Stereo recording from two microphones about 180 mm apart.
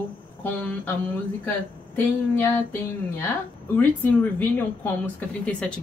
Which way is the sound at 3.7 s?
10° left (ahead or behind).